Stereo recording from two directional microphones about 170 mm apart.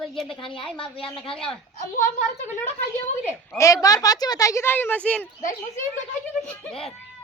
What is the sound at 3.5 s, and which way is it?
Speech, 20° left (ahead or behind).